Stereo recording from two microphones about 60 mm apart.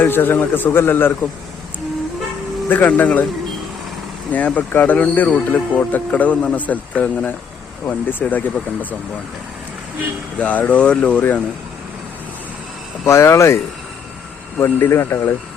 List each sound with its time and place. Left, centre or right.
0.0 s speech: left
2.6 s a man's voice: left
4.3 s a man's voice: left
10.3 s a man's voice: left
13.1 s speech: left
14.6 s speech: left